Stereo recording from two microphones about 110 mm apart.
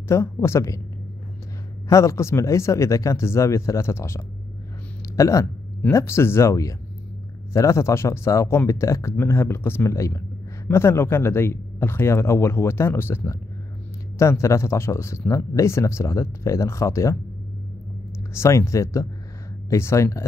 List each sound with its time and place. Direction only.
0.1 s speech: 25° left (ahead or behind)
1.9 s speech: 30° left (ahead or behind)
18.3 s speech: 25° left (ahead or behind)